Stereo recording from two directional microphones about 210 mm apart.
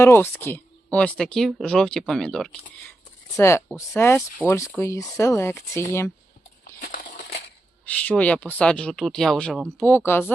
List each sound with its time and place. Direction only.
0.0 s speech: 10° left (ahead or behind)
3.3 s speech: 15° left (ahead or behind)
6.7 s crumpling: 45° left (ahead or behind)
7.9 s speech: 5° left (ahead or behind)